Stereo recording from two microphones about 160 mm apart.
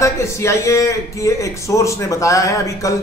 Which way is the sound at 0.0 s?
20° left (ahead or behind).